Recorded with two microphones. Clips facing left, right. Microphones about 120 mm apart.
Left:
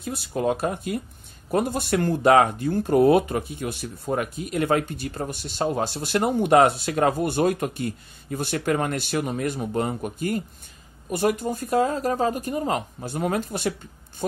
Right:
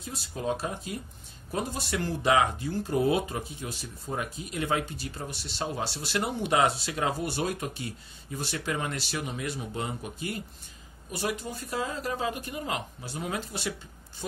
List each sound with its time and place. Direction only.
0.0 s speech: 60° left (ahead or behind)